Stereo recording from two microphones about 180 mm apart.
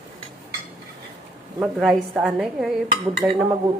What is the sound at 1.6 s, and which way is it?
Speech, 5° right (ahead or behind).